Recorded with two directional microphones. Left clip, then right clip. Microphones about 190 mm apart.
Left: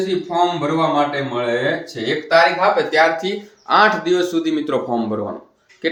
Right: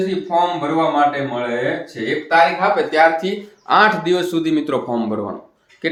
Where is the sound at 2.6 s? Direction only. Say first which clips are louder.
Even; 15° right (ahead or behind).